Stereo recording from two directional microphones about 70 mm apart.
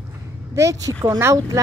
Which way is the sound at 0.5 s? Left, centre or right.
Right.